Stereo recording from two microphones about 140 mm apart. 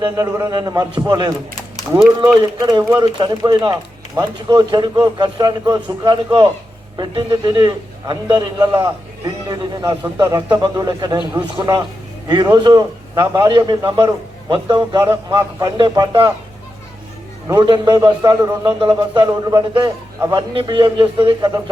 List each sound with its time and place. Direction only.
0.0 s a man's voice: 25° right (ahead or behind)
15.0 s a man's voice: 20° right (ahead or behind)
17.5 s a man's voice: 30° right (ahead or behind)
20.5 s speech: 35° right (ahead or behind)